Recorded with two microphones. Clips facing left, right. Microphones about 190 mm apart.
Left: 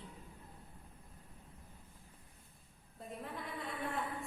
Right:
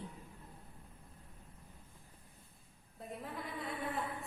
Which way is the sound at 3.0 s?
Centre (ahead or behind).